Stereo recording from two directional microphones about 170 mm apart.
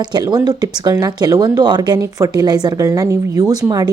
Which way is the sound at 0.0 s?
25° right (ahead or behind).